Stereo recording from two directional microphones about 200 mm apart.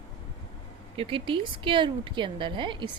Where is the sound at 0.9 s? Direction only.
25° right (ahead or behind).